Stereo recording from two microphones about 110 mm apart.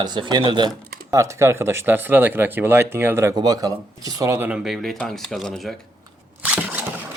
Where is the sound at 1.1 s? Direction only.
30° right (ahead or behind).